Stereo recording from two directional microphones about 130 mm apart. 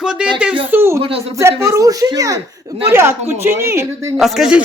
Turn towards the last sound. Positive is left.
turn(degrees=-5)  # may be behind; listen again after turning